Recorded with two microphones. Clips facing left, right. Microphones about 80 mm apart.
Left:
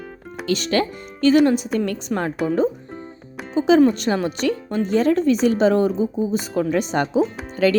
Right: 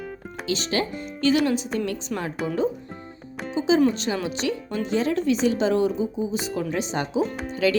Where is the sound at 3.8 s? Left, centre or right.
Left.